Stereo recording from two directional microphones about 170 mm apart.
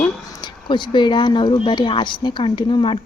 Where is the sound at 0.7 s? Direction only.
25° left (ahead or behind).